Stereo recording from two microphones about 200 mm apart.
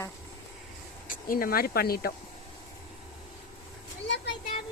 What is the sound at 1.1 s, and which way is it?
Speech, 45° left (ahead or behind).